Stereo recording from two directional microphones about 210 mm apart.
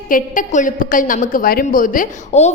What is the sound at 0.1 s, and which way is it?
A woman's voice, 40° left (ahead or behind).